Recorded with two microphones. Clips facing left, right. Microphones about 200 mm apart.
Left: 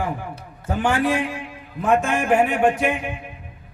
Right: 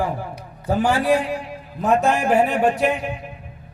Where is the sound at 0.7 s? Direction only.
35° right (ahead or behind).